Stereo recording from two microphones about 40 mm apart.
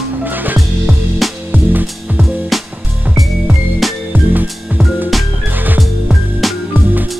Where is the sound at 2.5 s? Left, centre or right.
Centre.